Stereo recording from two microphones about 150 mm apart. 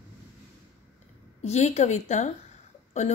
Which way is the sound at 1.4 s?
50° left (ahead or behind).